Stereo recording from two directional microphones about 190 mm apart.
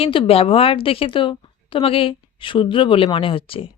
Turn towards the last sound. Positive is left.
turn(degrees=30)  # may be behind; listen again after turning